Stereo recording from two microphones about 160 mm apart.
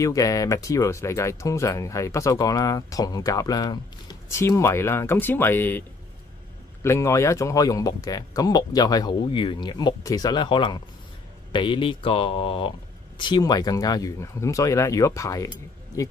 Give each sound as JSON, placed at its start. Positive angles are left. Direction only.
{"t": 0.0, "sound": "speech", "side_deg": 20}